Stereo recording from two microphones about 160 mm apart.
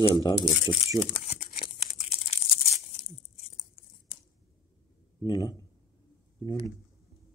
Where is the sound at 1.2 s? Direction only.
45° left (ahead or behind).